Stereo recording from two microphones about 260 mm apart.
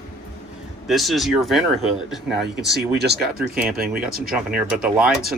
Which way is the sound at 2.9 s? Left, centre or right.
Right.